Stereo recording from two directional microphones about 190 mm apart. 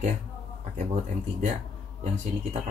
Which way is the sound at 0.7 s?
40° right (ahead or behind).